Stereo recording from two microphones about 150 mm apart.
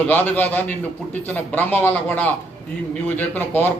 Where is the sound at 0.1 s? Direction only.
10° left (ahead or behind).